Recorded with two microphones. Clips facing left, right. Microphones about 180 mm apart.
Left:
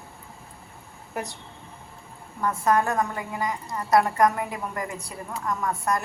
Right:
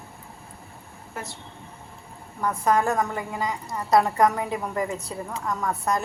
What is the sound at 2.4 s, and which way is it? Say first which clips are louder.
A woman's voice: even; 20° right (ahead or behind).